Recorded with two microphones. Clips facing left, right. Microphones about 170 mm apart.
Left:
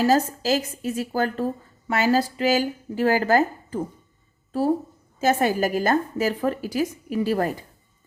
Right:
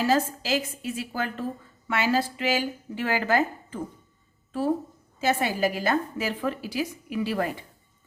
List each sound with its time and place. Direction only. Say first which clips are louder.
0.0 s speech: left 4 dB; 40° left (ahead or behind)
5.2 s a woman's voice: left 4 dB; 45° left (ahead or behind)